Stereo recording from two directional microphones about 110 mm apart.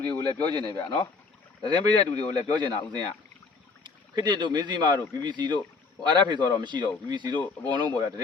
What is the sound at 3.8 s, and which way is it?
Speech, 45° right (ahead or behind).